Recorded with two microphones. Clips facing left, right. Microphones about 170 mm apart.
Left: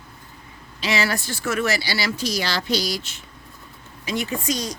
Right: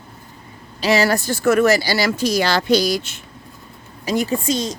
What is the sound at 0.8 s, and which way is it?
Speech, 40° right (ahead or behind).